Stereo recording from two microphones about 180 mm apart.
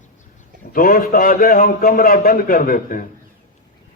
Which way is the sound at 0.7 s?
50° left (ahead or behind).